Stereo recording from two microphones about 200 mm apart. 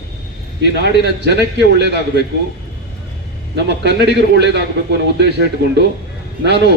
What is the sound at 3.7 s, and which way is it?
Speech, 55° right (ahead or behind).